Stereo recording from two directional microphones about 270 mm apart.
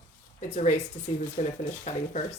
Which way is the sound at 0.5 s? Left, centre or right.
Left.